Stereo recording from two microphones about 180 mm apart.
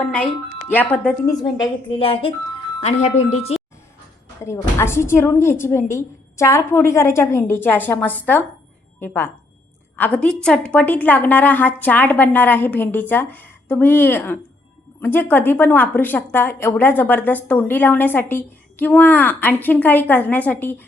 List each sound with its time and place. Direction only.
0.0 s a woman's voice: 10° left (ahead or behind)
1.0 s a woman's voice: 20° left (ahead or behind)
4.4 s a woman's voice: 15° left (ahead or behind)